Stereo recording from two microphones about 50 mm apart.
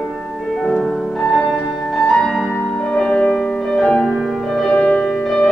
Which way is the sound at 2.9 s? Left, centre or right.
Centre.